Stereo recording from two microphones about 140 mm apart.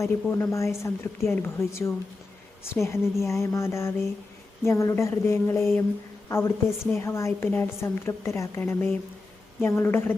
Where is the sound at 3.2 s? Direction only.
20° left (ahead or behind).